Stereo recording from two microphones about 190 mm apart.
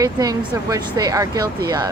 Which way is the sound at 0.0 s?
20° right (ahead or behind).